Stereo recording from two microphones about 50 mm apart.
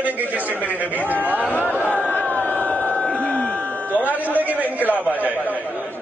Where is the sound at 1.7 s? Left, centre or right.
Right.